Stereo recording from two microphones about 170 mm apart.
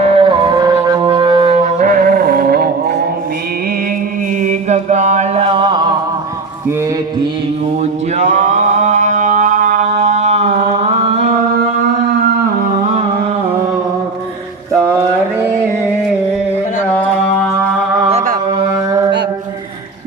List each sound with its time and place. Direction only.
0.0 s music: 35° right (ahead or behind)
1.8 s music: 50° right (ahead or behind)
4.4 s mantra: 45° right (ahead or behind); by 5.9 s 30° right (ahead or behind)
8.2 s mantra: 45° right (ahead or behind)
18.7 s music: 20° right (ahead or behind)